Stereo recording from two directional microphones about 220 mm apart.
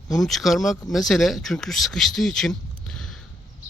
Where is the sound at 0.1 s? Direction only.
Centre (ahead or behind).